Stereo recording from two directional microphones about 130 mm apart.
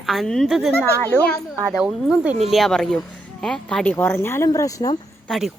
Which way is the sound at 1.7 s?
5° right (ahead or behind).